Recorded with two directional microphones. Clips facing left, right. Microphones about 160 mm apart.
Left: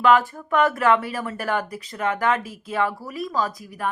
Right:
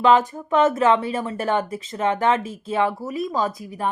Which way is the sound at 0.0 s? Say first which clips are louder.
Right 1 dB; 20° right (ahead or behind).